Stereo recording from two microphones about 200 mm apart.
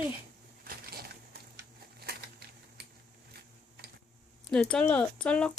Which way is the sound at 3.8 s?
50° right (ahead or behind).